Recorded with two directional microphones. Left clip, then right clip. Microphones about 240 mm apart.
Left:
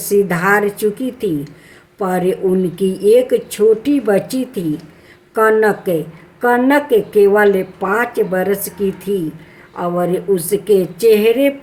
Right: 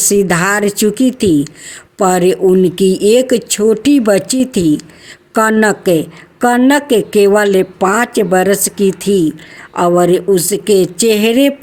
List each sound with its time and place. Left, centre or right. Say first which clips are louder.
0.1 s a woman's voice: even; right